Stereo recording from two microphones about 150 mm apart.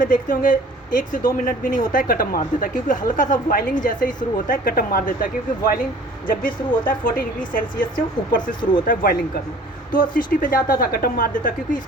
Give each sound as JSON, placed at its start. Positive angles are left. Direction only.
{"t": 0.0, "sound": "speech", "side_deg": 65}